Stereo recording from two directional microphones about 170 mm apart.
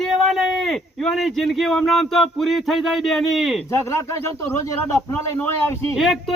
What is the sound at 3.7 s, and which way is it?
A man's voice, 15° left (ahead or behind).